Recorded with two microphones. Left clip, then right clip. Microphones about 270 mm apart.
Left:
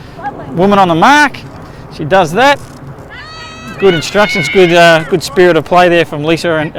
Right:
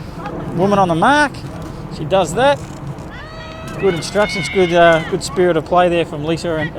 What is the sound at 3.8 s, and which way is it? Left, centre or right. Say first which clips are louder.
Speech: left 7 dB; left.